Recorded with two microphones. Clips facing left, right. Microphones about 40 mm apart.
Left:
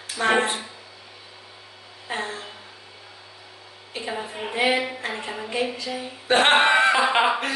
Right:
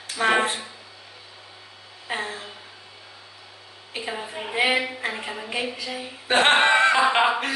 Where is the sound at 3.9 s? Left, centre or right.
Centre.